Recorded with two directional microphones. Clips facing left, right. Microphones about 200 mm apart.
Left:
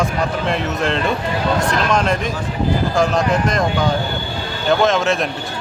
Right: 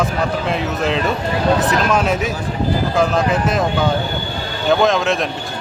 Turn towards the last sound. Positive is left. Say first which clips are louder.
# right 1 dB
turn(degrees=0)  # may be behind; listen again after turning